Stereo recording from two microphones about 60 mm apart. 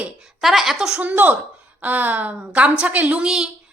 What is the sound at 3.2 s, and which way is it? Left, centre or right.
Speech, centre.